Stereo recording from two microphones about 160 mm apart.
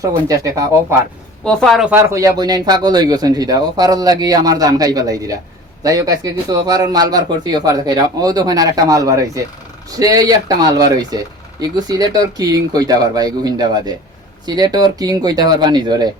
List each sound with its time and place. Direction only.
0.3 s speech: 20° right (ahead or behind)
1.5 s speech: centre (ahead or behind); by 16.0 s 25° right (ahead or behind)